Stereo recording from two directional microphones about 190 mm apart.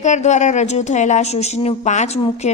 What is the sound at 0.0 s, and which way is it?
A woman's voice, 40° left (ahead or behind).